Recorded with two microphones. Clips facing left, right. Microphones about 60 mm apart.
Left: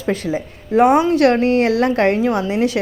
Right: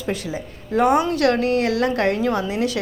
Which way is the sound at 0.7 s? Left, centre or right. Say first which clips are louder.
Left 5 dB; left.